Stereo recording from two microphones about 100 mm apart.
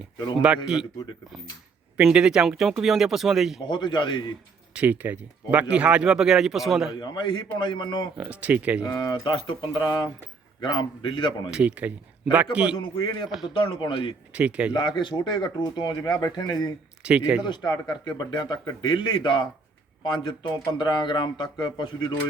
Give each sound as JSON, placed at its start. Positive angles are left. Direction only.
{"t": 0.4, "sound": "speech", "side_deg": -10}
{"t": 2.0, "sound": "speech", "side_deg": -5}
{"t": 3.7, "sound": "speech", "side_deg": 50}
{"t": 4.7, "sound": "speech", "side_deg": -15}
{"t": 7.0, "sound": "speech", "side_deg": 50}
{"t": 8.2, "sound": "speech", "side_deg": -15}
{"t": 8.8, "sound": "a man's voice", "side_deg": 45}
{"t": 11.5, "sound": "speech", "side_deg": -15}
{"t": 12.7, "sound": "a man's voice", "side_deg": 60}
{"t": 14.3, "sound": "speech", "side_deg": -10}
{"t": 14.7, "sound": "speech", "side_deg": 50}
{"t": 17.0, "sound": "speech", "side_deg": -10}
{"t": 17.4, "sound": "speech", "side_deg": 45}